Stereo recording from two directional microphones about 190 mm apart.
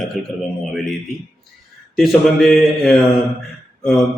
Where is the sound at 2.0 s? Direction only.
Centre (ahead or behind).